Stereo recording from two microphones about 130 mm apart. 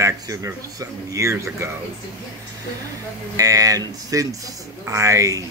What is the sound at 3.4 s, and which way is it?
Speech, 25° right (ahead or behind).